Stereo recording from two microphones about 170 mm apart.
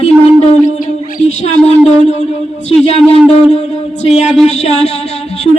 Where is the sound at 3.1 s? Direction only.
40° left (ahead or behind).